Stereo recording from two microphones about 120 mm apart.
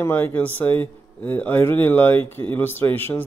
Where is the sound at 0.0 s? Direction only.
20° left (ahead or behind).